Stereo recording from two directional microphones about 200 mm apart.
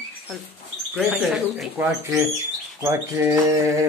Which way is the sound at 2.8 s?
15° right (ahead or behind).